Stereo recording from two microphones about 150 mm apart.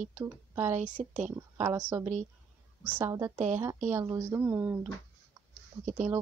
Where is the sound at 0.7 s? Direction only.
60° right (ahead or behind).